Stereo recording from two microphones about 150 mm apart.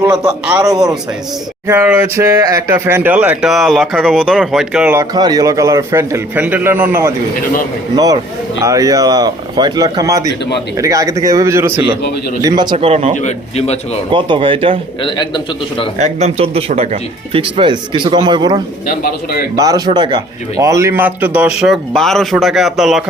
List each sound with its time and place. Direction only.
0.6 s a man's voice: 25° right (ahead or behind); by 4.9 s 5° right (ahead or behind)
4.9 s a man's voice: 25° right (ahead or behind)
7.9 s a man's voice: 25° right (ahead or behind)
12.7 s speech: 45° right (ahead or behind)
13.1 s a man's voice: 45° left (ahead or behind)
14.1 s speech: 35° right (ahead or behind)
15.0 s a man's voice: 30° left (ahead or behind)
16.0 s a man's voice: 50° right (ahead or behind); by 21.5 s 10° right (ahead or behind)
21.6 s speech: centre (ahead or behind)